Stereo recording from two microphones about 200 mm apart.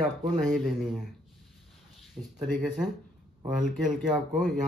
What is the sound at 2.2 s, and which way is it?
Speech, 25° right (ahead or behind).